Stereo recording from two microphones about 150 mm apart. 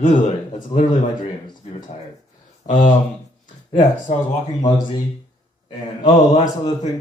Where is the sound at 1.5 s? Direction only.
30° left (ahead or behind).